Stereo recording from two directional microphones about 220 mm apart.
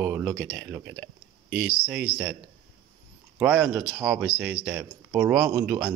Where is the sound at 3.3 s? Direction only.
10° right (ahead or behind).